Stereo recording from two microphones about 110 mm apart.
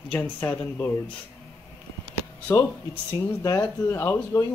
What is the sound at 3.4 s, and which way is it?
Speech, 30° left (ahead or behind).